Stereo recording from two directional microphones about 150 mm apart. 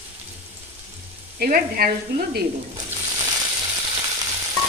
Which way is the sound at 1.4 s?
75° right (ahead or behind).